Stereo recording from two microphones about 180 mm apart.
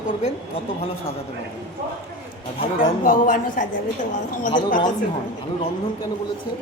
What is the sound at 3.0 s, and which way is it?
Speech, 50° left (ahead or behind).